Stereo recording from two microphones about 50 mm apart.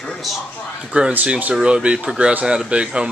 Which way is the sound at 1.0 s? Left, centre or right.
Right.